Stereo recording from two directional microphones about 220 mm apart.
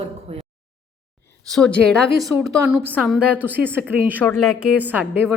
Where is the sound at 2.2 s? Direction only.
10° right (ahead or behind).